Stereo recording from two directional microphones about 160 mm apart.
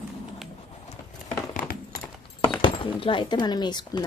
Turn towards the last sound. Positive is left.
turn(degrees=25)  # may be behind; listen again after turning